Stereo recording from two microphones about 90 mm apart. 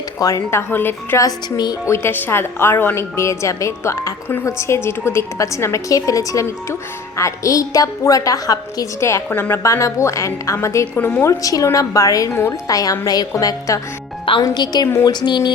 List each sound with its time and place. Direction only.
0.2 s a woman's voice: 40° left (ahead or behind)
0.7 s a woman's voice: 25° left (ahead or behind)
1.2 s speech: 50° left (ahead or behind)
1.9 s a woman's voice: 25° left (ahead or behind)
9.6 s a woman's voice: 35° left (ahead or behind)
10.9 s a woman's voice: 20° left (ahead or behind)
11.3 s a woman's voice: 40° left (ahead or behind)
12.6 s a woman's voice: 40° left (ahead or behind)
14.4 s speech: 50° left (ahead or behind)